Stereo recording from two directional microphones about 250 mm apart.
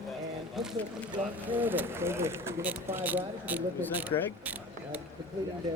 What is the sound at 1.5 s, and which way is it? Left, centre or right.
Speech, centre.